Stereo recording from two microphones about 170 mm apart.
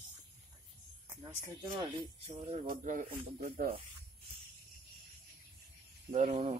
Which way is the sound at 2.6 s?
55° right (ahead or behind).